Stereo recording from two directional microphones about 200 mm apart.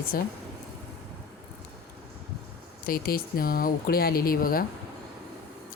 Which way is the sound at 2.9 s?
45° left (ahead or behind).